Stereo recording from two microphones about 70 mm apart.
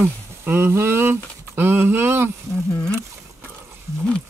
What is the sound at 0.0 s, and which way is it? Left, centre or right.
Speech, right.